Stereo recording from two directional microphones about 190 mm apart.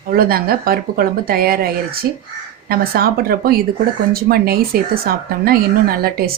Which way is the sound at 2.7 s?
50° right (ahead or behind).